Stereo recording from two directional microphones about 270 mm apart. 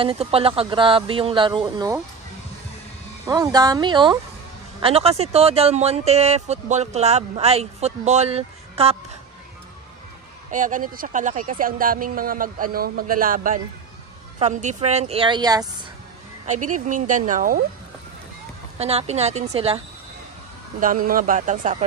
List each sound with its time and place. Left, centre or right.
0.0 s speech: right
3.3 s speech: centre
10.5 s speech: right
16.6 s speech: right
18.8 s speech: right
20.8 s speech: right